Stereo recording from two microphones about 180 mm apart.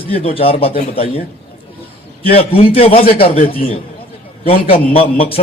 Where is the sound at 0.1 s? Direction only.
30° left (ahead or behind).